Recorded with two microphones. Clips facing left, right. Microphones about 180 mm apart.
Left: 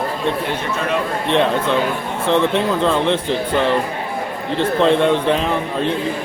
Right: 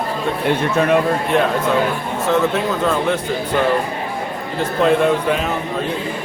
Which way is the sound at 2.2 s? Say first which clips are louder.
Left 1 dB; 30° left (ahead or behind).